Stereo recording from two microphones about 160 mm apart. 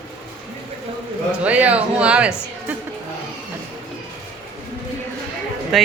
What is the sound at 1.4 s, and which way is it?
Speech, 10° right (ahead or behind).